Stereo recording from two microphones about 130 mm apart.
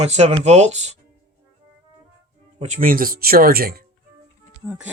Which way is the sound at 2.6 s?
65° right (ahead or behind).